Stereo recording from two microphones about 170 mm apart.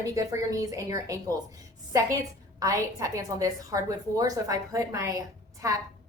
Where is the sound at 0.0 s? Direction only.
20° right (ahead or behind).